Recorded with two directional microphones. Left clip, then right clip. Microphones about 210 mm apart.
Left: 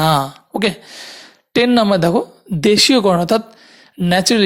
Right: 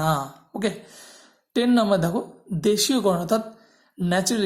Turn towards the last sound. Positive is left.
turn(degrees=30)  # may be behind; listen again after turning